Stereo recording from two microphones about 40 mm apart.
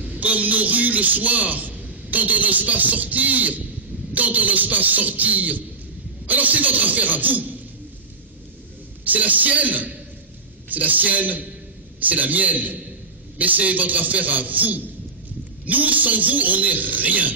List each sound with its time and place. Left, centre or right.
0.0 s a man's voice: right
9.0 s a man's voice: right